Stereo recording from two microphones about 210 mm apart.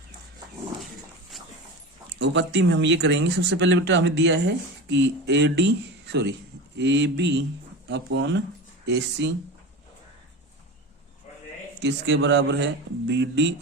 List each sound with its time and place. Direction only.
2.1 s speech: 55° right (ahead or behind)
11.8 s speech: 55° right (ahead or behind)